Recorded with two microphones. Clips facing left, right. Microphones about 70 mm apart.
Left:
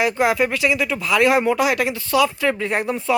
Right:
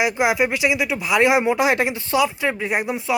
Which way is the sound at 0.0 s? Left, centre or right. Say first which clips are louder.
Left 1 dB; centre.